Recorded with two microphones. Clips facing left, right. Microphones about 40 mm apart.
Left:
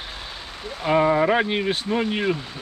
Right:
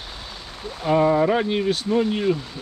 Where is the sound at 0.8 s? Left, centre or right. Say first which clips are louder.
Right 1 dB; left.